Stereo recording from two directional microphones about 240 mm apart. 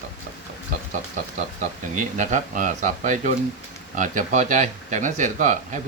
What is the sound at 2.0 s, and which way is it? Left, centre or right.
Speech, right.